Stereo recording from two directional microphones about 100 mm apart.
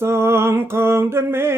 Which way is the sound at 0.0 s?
25° right (ahead or behind).